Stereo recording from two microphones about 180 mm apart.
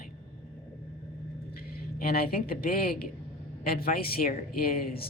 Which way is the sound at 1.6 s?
55° left (ahead or behind).